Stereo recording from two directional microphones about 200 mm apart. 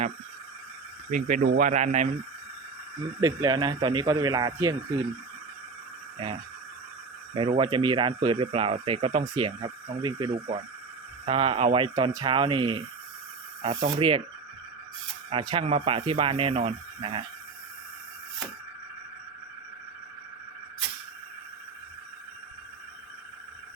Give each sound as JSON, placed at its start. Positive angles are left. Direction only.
{"t": 1.1, "sound": "speech", "side_deg": -40}
{"t": 3.2, "sound": "speech", "side_deg": -20}
{"t": 6.2, "sound": "speech", "side_deg": -25}
{"t": 15.3, "sound": "speech", "side_deg": -25}